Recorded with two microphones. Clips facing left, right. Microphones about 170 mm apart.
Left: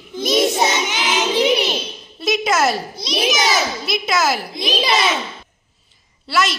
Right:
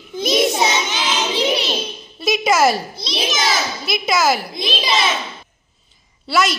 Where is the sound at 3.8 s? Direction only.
Centre (ahead or behind).